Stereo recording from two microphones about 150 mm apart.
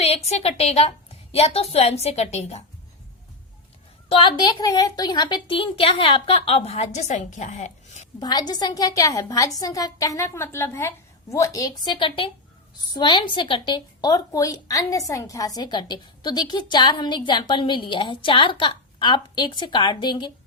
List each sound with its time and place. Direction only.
0.0 s a woman's voice: 40° left (ahead or behind)
4.1 s a woman's voice: 35° left (ahead or behind); by 8.0 s 50° left (ahead or behind)
8.2 s a woman's voice: 25° left (ahead or behind)